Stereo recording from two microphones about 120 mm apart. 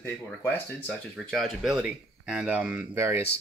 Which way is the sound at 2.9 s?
20° right (ahead or behind).